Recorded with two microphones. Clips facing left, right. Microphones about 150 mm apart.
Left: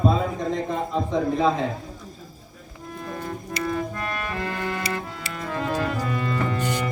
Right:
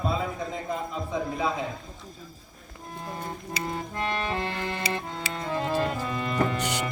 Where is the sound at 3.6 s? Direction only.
25° right (ahead or behind).